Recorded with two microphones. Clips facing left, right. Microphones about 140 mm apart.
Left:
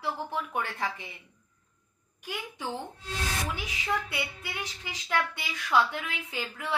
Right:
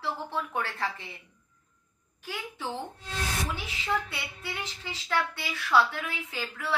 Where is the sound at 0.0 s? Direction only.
15° left (ahead or behind).